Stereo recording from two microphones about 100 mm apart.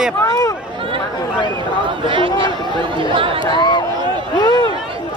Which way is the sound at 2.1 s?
60° right (ahead or behind).